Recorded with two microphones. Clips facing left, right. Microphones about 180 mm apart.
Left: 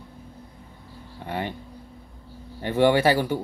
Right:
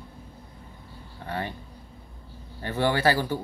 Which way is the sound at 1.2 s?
15° left (ahead or behind).